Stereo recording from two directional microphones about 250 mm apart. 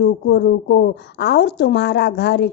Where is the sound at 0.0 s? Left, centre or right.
Left.